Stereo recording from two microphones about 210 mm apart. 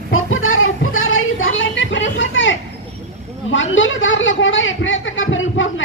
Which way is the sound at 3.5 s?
65° left (ahead or behind).